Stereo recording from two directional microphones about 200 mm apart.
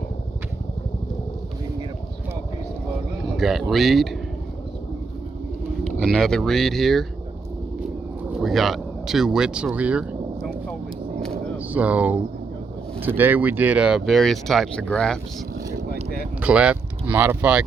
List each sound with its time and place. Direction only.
3.3 s speech: centre (ahead or behind)
6.0 s speech: centre (ahead or behind)
8.3 s a sound: centre (ahead or behind)
11.5 s speech: 5° right (ahead or behind)
16.4 s speech: 5° right (ahead or behind)